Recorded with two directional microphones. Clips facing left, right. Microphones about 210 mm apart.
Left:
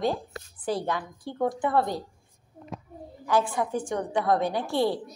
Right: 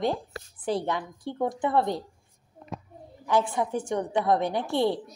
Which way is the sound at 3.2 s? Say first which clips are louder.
Even; 20° right (ahead or behind).